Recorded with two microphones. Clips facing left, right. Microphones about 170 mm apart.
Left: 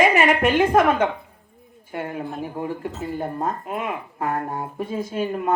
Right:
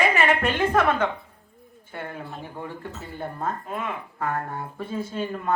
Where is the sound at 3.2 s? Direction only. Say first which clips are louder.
Left 3 dB; 40° left (ahead or behind).